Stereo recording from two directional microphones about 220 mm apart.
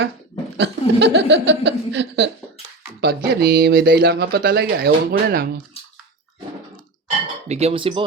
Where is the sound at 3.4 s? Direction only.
45° right (ahead or behind).